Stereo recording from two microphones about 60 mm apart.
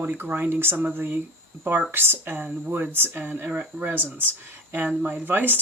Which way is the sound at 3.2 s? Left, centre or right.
Right.